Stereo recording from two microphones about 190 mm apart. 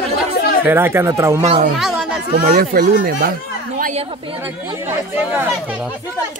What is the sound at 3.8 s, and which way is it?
Speech, 35° right (ahead or behind).